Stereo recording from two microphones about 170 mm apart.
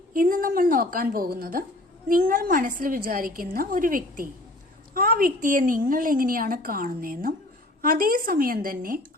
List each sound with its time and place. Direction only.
0.1 s a woman's voice: 55° right (ahead or behind)